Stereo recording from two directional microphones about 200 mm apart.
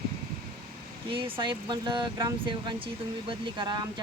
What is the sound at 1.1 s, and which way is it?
Speech, 25° right (ahead or behind).